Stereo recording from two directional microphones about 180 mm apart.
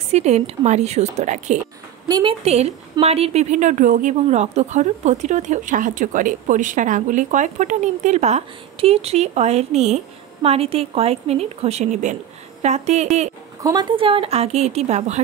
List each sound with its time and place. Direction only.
0.1 s a woman's voice: 40° right (ahead or behind)
2.0 s a woman's voice: 20° right (ahead or behind)
2.4 s a woman's voice: 35° right (ahead or behind)
13.6 s a woman's voice: 20° right (ahead or behind)
13.9 s a woman's voice: 30° right (ahead or behind)